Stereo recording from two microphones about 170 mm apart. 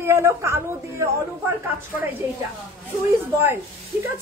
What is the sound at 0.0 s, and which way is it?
Speech, 15° right (ahead or behind).